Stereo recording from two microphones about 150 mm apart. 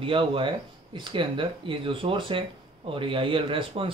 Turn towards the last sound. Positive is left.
turn(degrees=-35)  # may be behind; listen again after turning